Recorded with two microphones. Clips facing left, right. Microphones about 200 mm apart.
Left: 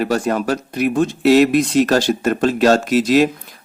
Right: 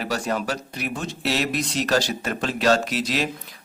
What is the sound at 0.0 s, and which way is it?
Speech, 50° left (ahead or behind).